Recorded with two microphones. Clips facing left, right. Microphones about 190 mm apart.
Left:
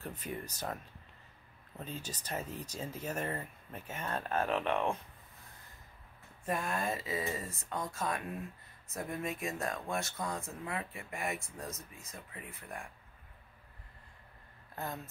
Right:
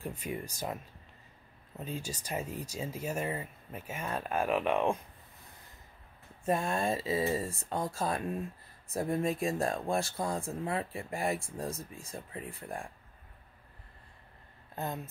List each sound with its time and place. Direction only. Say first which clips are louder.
0.0 s speech: right 3 dB; 10° right (ahead or behind)
1.8 s speech: right 4 dB; 10° right (ahead or behind)
6.4 s speech: right 5 dB; 25° right (ahead or behind)